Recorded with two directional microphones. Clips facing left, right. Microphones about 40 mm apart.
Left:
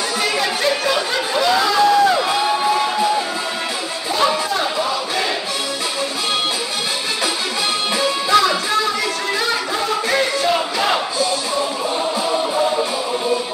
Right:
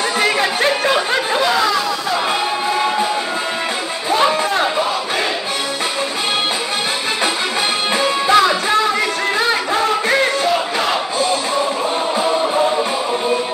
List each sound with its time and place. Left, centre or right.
0.2 s chatter: right
4.1 s a sound: right
8.3 s music: right